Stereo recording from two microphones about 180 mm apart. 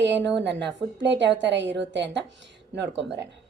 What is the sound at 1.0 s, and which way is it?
A woman's voice, 75° right (ahead or behind).